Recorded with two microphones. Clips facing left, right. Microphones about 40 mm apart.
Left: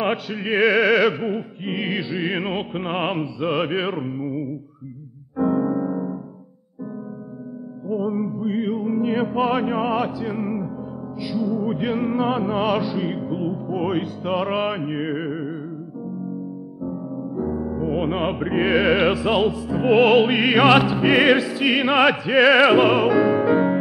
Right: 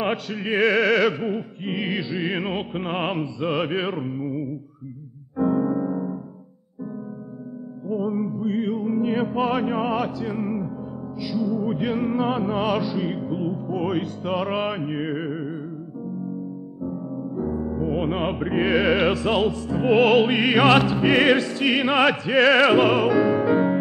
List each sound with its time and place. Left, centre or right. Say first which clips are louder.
0.0 s music: left 2 dB; centre
5.4 s piano: left 1 dB; centre
7.9 s music: left 1 dB; centre
16.8 s music: left 1 dB; centre